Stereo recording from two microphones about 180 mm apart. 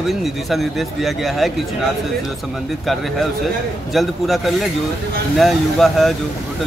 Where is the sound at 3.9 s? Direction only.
Centre (ahead or behind).